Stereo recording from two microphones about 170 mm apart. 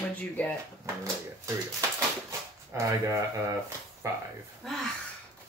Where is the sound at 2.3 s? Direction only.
20° right (ahead or behind).